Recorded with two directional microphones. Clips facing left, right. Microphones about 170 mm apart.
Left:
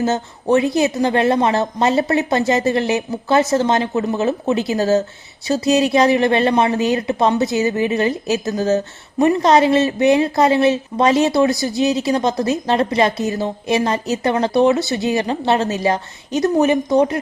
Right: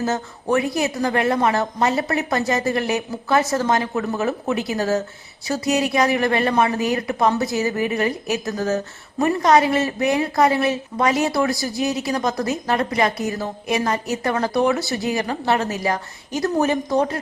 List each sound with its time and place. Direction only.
0.0 s speech: 25° left (ahead or behind)